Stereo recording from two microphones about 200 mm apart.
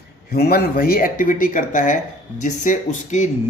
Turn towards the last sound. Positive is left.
turn(degrees=40)  # may be behind; listen again after turning